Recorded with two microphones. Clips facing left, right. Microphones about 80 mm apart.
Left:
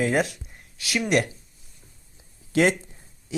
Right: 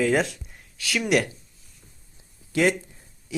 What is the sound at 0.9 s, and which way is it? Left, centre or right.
Speech, centre.